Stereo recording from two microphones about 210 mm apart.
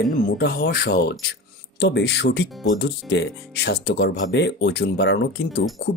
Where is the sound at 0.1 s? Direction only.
45° left (ahead or behind).